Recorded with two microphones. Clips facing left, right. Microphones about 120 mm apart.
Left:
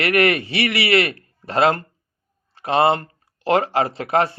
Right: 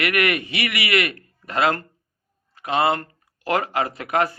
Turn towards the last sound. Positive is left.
turn(degrees=30)  # may be behind; listen again after turning